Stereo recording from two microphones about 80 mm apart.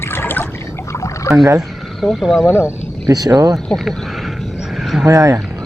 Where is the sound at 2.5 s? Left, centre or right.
Left.